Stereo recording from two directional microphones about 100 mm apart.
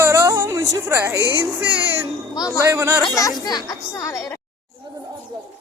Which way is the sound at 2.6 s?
30° right (ahead or behind).